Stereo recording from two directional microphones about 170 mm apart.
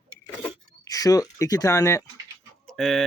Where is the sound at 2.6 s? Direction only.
Centre (ahead or behind).